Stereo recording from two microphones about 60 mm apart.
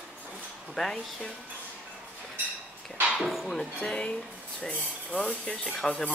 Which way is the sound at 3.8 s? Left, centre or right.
Centre.